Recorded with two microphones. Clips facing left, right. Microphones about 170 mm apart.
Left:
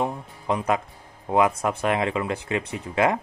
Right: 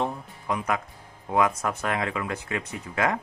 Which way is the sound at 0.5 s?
25° left (ahead or behind).